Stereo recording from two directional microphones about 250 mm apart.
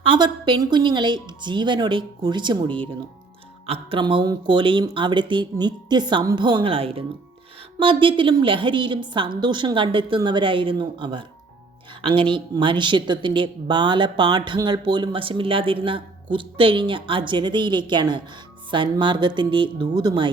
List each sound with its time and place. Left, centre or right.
0.0 s speech: centre
3.7 s speech: right